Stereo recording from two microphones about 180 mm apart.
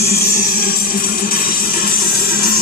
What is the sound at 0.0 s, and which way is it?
Music, 55° left (ahead or behind).